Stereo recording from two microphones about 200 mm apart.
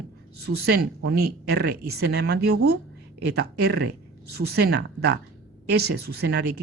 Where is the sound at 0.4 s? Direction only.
55° right (ahead or behind).